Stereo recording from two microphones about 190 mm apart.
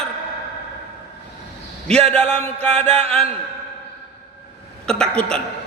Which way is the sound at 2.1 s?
10° left (ahead or behind).